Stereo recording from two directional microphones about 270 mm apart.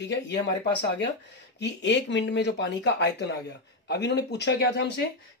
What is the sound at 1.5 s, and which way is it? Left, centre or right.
Speech, left.